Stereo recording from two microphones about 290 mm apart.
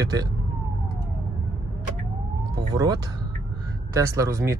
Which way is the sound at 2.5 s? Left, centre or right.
Centre.